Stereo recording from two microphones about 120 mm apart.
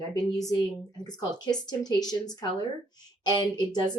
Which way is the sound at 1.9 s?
35° left (ahead or behind).